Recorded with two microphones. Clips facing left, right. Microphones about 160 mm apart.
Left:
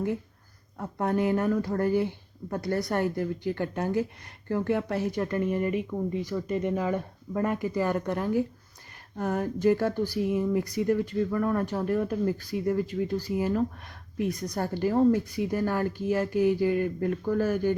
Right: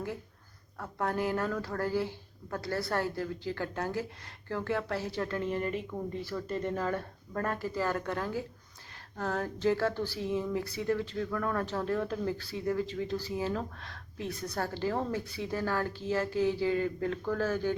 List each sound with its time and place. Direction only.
0.8 s speech: 20° left (ahead or behind)